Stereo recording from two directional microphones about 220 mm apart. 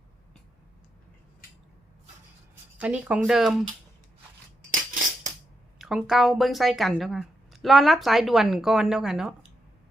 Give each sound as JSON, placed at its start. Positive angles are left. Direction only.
{"t": 2.7, "sound": "a woman's voice", "side_deg": -5}
{"t": 4.7, "sound": "a sound", "side_deg": -35}
{"t": 5.8, "sound": "a woman's voice", "side_deg": 0}